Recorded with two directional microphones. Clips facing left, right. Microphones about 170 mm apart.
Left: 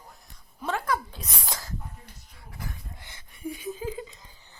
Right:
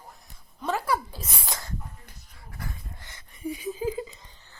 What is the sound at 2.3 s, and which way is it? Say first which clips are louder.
Dog: right 1 dB; centre (ahead or behind).